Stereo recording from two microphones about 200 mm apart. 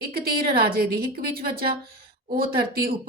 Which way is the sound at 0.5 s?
50° right (ahead or behind).